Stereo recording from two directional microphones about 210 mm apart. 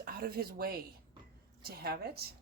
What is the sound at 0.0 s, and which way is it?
Speech, 45° right (ahead or behind).